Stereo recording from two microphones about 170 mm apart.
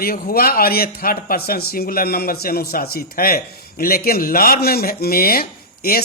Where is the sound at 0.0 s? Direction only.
60° left (ahead or behind).